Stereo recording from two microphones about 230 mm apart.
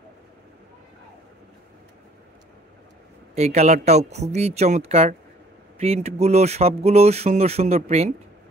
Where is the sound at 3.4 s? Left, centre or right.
Right.